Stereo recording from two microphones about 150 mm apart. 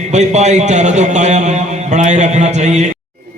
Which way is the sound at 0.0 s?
50° right (ahead or behind).